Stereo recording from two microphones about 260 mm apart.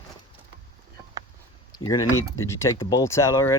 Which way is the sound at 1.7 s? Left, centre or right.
Centre.